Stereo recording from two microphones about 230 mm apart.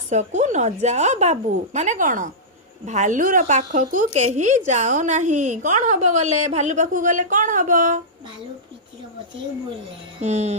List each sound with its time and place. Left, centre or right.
0.1 s speech: right
10.2 s speech: right